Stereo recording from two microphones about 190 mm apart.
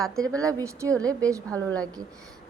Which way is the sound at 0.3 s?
15° right (ahead or behind).